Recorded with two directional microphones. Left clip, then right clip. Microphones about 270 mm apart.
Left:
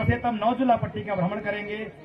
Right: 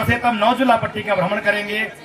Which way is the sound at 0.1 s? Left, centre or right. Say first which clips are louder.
Right 9 dB; right.